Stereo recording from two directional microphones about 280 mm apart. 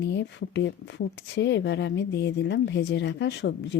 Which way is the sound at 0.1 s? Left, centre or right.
Left.